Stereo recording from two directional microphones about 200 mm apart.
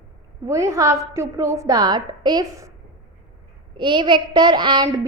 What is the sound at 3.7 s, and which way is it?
A child's voice, 25° right (ahead or behind).